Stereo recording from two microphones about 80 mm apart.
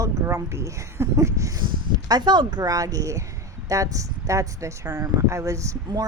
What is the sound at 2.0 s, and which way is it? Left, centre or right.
Speech, right.